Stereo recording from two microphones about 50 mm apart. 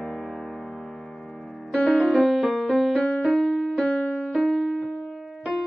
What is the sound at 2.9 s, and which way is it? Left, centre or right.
Music, centre.